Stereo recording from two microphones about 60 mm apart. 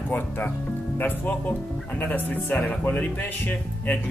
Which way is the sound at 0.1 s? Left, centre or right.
Left.